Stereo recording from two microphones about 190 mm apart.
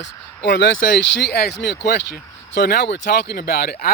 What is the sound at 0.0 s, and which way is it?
Speech, 70° left (ahead or behind).